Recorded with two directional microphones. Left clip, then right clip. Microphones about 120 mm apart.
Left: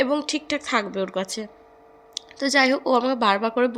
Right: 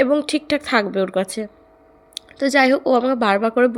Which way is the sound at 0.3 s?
40° right (ahead or behind).